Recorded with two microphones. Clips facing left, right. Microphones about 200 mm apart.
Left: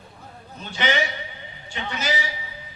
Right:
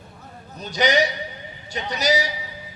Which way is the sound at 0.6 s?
40° right (ahead or behind).